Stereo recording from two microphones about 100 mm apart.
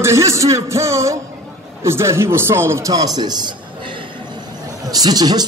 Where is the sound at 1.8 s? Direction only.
25° right (ahead or behind).